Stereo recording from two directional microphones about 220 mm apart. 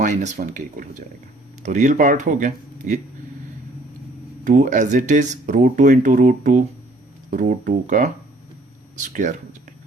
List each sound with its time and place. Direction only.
0.0 s speech: 30° right (ahead or behind)
4.4 s speech: 35° right (ahead or behind)